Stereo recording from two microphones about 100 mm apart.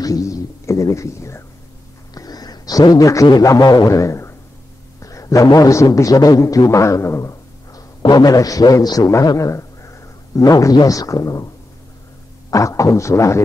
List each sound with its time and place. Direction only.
0.0 s speech: 35° left (ahead or behind)
2.1 s a sound: 40° left (ahead or behind)
3.3 s a man's voice: 40° left (ahead or behind)